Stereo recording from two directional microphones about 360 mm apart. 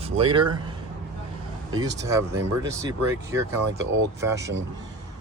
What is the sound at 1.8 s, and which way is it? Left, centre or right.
Speech, centre.